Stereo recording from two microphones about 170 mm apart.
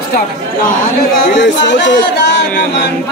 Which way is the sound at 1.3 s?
90° left.